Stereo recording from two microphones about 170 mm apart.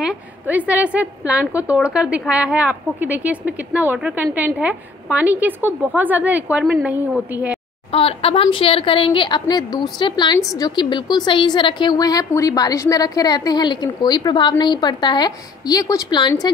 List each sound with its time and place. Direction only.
0.0 s a woman's voice: 10° right (ahead or behind)
7.9 s a woman's voice: 35° left (ahead or behind)